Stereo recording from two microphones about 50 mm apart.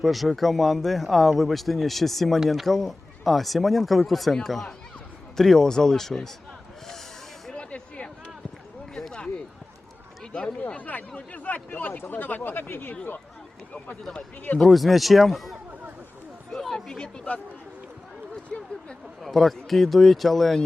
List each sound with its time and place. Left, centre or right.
0.0 s speech: centre
7.5 s music: left
9.0 s a sound: centre
10.8 s speech: left
14.6 s speech: centre
16.5 s a sound: centre
19.2 s speech: centre